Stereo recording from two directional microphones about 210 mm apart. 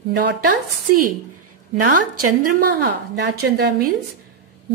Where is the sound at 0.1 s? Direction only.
50° right (ahead or behind).